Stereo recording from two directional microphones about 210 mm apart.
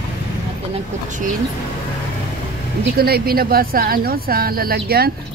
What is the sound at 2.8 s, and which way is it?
Speech, 45° right (ahead or behind).